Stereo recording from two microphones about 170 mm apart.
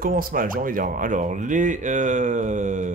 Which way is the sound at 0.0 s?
55° right (ahead or behind).